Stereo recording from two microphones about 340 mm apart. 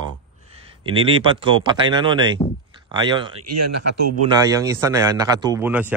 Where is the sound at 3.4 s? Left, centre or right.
Right.